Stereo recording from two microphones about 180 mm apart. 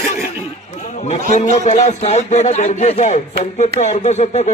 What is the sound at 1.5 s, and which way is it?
Speech, 40° left (ahead or behind).